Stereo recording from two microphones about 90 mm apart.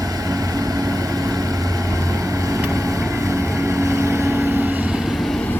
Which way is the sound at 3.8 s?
35° right (ahead or behind).